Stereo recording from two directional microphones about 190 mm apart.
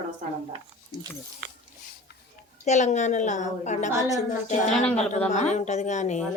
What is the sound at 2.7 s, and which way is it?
A woman's voice, 40° left (ahead or behind).